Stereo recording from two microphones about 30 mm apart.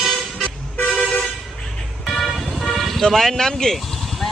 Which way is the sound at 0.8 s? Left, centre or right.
Left.